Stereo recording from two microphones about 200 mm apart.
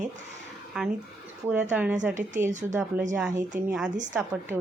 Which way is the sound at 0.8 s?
5° right (ahead or behind).